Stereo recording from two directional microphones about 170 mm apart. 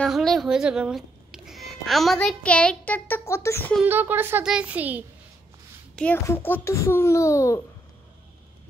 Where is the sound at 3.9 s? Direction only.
10° right (ahead or behind).